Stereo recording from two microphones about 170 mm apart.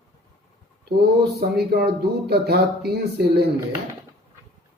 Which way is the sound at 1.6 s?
70° right (ahead or behind).